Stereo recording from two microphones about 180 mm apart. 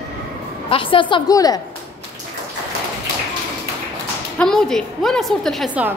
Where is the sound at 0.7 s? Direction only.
30° left (ahead or behind).